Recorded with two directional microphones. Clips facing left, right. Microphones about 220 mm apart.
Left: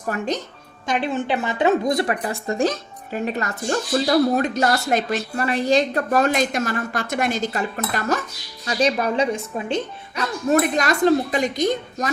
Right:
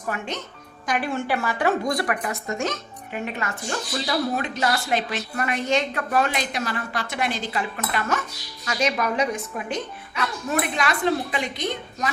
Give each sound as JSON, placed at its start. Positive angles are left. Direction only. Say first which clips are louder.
{"t": 0.1, "sound": "a woman's voice", "louder": "left 5 dB", "side_deg": 40}
{"t": 0.9, "sound": "a woman's voice", "louder": "left 3 dB", "side_deg": 25}
{"t": 5.4, "sound": "a woman's voice", "louder": "left 4 dB", "side_deg": 35}
{"t": 10.5, "sound": "a woman's voice", "louder": "left 7 dB", "side_deg": 40}